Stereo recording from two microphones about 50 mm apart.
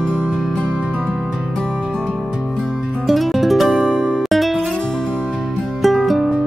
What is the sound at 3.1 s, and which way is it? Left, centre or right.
Music, centre.